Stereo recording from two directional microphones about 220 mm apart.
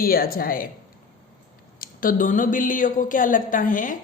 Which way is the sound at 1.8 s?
40° left (ahead or behind).